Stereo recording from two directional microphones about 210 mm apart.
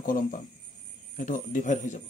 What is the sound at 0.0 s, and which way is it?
Speech, 40° left (ahead or behind).